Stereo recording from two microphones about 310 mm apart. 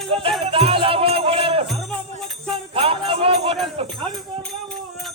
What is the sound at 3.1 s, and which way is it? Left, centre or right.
Music, centre.